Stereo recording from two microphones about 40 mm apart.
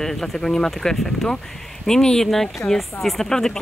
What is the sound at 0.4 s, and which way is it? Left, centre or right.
A woman's voice, centre.